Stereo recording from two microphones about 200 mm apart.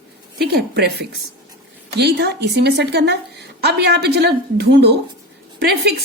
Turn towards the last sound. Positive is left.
turn(degrees=-55)  # may be behind; listen again after turning